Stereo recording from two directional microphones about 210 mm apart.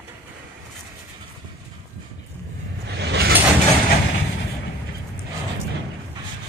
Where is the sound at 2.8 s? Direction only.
55° right (ahead or behind).